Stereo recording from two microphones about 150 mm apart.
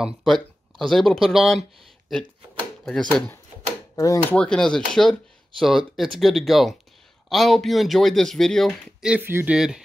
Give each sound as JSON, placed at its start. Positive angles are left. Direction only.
{"t": 0.0, "sound": "speech", "side_deg": 0}
{"t": 2.8, "sound": "speech", "side_deg": 5}
{"t": 3.9, "sound": "speech", "side_deg": 20}
{"t": 4.4, "sound": "speech", "side_deg": 5}